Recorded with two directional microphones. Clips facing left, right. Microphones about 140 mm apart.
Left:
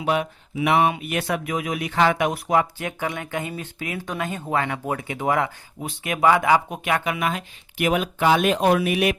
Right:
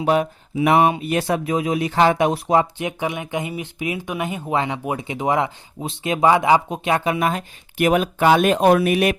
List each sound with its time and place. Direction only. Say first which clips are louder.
0.0 s speech: right 4 dB; 35° right (ahead or behind)